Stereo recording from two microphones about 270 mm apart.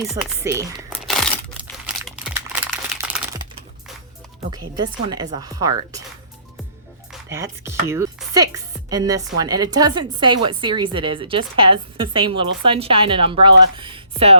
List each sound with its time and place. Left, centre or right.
0.0 s speech: centre
0.4 s speech: centre
0.9 s a sound: centre
2.6 s crumpling: centre
4.5 s speech: centre
7.1 s speech: centre